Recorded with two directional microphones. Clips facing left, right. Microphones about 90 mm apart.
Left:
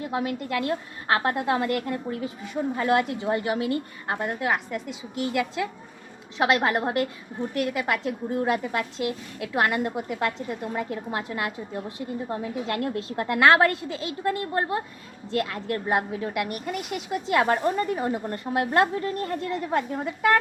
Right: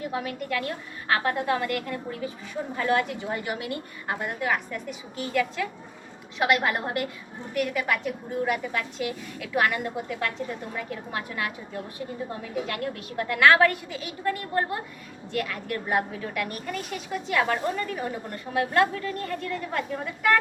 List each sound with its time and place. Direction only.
0.1 s a woman's voice: 25° left (ahead or behind)
6.4 s a woman's voice: 25° left (ahead or behind)